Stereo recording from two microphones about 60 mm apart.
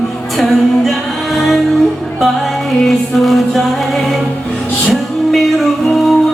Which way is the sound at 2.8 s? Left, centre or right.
Centre.